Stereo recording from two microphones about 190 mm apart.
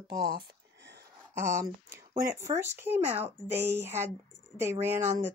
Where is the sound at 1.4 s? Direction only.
15° right (ahead or behind).